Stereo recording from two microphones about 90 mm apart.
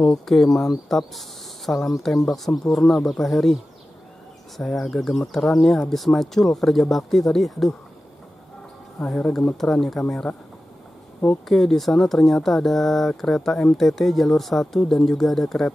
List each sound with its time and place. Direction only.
0.0 s speech: 5° left (ahead or behind)
4.6 s speech: 5° left (ahead or behind)
9.0 s speech: 10° left (ahead or behind)